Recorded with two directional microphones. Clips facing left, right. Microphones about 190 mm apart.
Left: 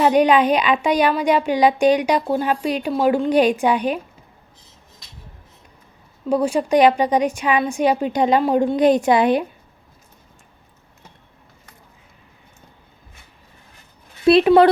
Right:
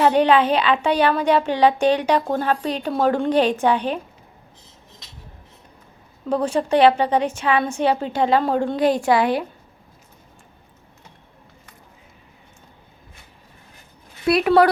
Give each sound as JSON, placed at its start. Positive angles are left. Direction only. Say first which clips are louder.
{"t": 0.0, "sound": "a child's voice", "louder": "left 1 dB", "side_deg": 15}
{"t": 6.2, "sound": "a child's voice", "louder": "left 2 dB", "side_deg": 10}
{"t": 14.3, "sound": "a woman's voice", "louder": "left 4 dB", "side_deg": 25}